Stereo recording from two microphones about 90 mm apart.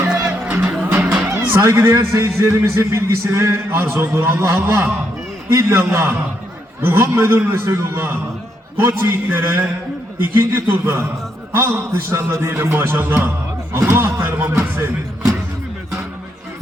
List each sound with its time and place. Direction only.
0.4 s music: 15° right (ahead or behind)
1.4 s a sound: 25° right (ahead or behind)
1.6 s a man's voice: 35° right (ahead or behind)